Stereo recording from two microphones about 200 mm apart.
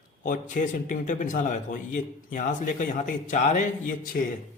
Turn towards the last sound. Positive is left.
turn(degrees=45)  # may be behind; listen again after turning